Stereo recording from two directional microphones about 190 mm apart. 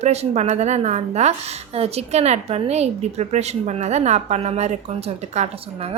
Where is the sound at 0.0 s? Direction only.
35° right (ahead or behind).